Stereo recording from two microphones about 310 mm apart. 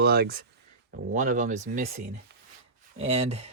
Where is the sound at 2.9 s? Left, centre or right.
Centre.